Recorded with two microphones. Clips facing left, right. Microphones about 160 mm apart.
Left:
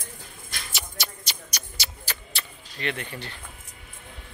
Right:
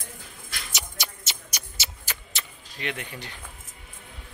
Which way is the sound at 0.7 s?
20° right (ahead or behind).